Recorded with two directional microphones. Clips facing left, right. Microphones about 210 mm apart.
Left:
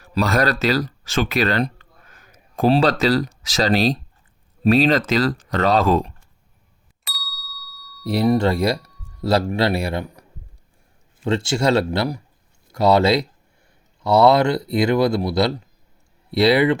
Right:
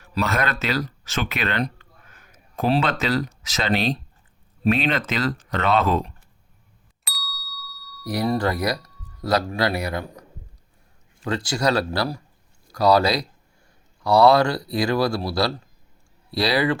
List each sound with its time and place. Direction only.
0.0 s speech: 35° left (ahead or behind)
7.0 s ding: centre (ahead or behind)
8.0 s speech: 25° left (ahead or behind)